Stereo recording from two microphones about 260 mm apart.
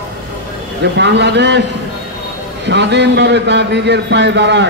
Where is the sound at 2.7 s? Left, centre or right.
Right.